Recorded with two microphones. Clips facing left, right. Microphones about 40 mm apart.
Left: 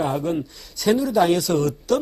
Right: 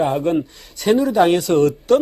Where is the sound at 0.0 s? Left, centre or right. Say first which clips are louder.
Right 5 dB; right.